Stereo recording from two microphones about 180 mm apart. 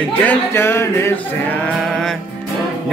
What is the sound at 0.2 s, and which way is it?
Speech, 10° left (ahead or behind).